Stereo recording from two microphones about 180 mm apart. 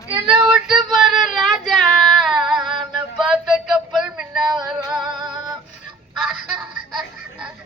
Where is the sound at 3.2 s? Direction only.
5° right (ahead or behind).